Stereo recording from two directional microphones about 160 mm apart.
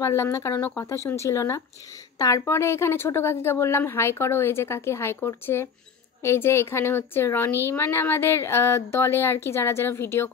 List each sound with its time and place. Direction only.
0.0 s speech: 20° left (ahead or behind)